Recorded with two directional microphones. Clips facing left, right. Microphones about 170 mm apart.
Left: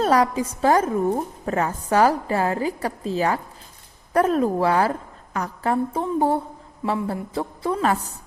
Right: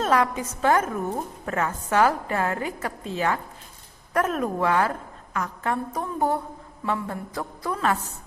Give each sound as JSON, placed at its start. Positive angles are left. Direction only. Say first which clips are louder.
{"t": 0.0, "sound": "a woman's voice", "louder": "left 4 dB", "side_deg": 35}